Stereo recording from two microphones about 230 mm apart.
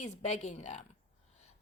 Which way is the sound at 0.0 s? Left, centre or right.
Left.